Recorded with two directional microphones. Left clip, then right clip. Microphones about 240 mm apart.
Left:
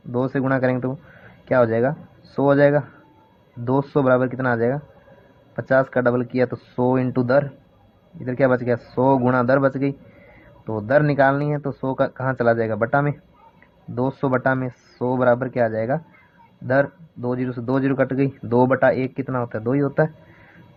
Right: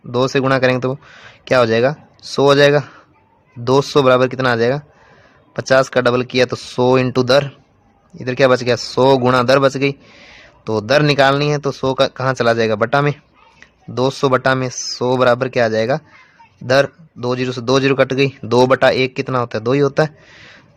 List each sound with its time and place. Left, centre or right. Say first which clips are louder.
0.1 s speech: right 7 dB; right